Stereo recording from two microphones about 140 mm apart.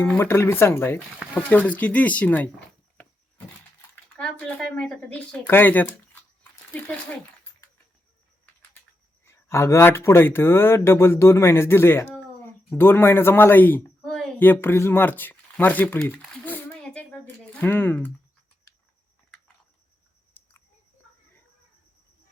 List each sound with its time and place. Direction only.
0.0 s speech: 15° left (ahead or behind)
3.0 s a sound: 10° left (ahead or behind)
9.2 s speech: 20° left (ahead or behind)
14.0 s a sound: 5° left (ahead or behind)
14.3 s speech: 15° left (ahead or behind)
20.4 s chewing: 15° left (ahead or behind)